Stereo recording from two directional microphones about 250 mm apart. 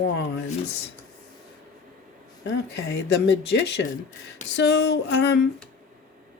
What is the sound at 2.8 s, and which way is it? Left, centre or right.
Speech, left.